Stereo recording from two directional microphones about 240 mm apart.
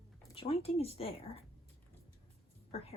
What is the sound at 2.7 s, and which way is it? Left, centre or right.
Speech, left.